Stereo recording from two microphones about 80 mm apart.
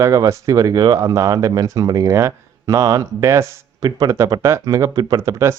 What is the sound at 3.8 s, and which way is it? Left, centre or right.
A man's voice, right.